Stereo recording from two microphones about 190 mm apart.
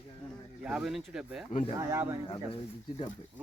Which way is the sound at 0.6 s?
5° right (ahead or behind).